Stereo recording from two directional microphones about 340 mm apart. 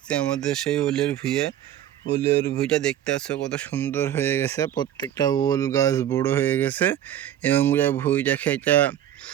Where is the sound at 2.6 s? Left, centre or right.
Centre.